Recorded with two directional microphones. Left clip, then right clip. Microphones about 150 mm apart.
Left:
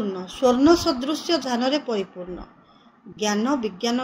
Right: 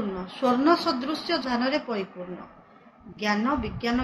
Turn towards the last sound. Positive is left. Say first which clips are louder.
# left 3 dB
turn(degrees=75)  # may be behind; listen again after turning